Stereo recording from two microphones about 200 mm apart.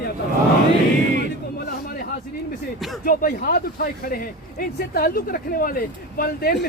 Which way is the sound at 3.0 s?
50° left (ahead or behind).